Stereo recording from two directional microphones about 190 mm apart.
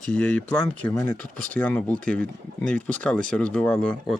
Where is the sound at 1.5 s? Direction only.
10° left (ahead or behind).